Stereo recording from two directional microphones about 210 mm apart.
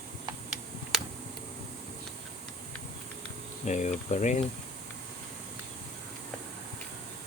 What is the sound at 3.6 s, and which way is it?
Speech, 35° left (ahead or behind).